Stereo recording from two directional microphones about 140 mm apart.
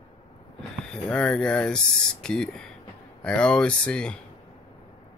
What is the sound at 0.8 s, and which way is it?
Speech, 5° left (ahead or behind).